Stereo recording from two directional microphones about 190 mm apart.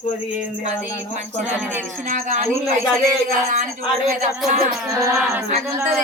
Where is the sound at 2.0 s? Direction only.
40° right (ahead or behind).